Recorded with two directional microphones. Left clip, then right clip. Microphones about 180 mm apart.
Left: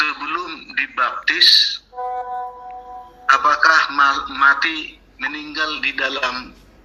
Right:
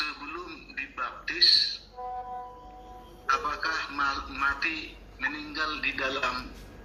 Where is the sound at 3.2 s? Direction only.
45° left (ahead or behind).